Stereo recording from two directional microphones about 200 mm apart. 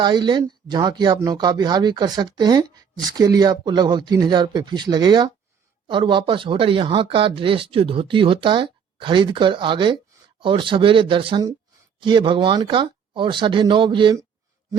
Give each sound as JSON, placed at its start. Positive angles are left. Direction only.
{"t": 0.0, "sound": "speech", "side_deg": -20}